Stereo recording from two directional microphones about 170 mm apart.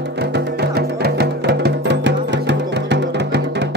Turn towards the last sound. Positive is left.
turn(degrees=-90)